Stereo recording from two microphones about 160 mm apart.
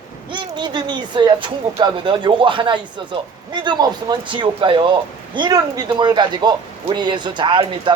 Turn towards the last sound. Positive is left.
turn(degrees=-30)  # may be behind; listen again after turning